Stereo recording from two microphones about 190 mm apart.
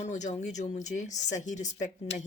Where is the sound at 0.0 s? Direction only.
40° left (ahead or behind).